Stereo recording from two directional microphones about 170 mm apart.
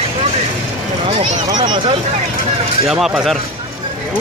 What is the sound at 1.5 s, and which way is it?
Speech, 25° right (ahead or behind).